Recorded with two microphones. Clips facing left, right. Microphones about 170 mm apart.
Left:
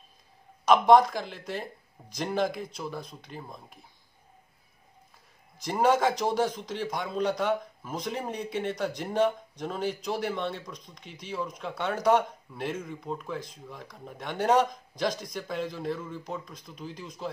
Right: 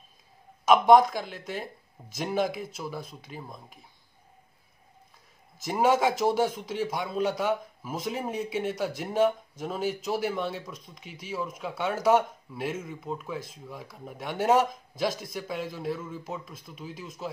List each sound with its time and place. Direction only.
0.7 s speech: centre (ahead or behind)
5.6 s speech: 5° right (ahead or behind)